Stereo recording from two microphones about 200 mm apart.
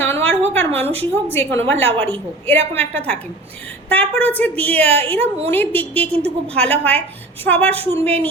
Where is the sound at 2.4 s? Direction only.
10° left (ahead or behind).